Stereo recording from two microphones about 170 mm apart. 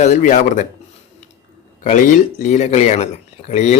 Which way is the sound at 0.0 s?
45° left (ahead or behind).